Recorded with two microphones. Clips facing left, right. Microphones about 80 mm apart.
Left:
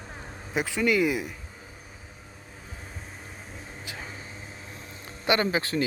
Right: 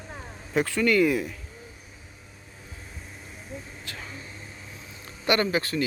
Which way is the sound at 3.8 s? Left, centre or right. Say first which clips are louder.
Left 1 dB; centre.